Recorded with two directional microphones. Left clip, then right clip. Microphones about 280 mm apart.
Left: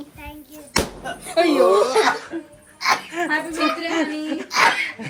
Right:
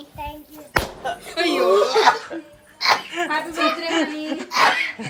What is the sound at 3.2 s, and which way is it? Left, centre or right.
Speech, centre.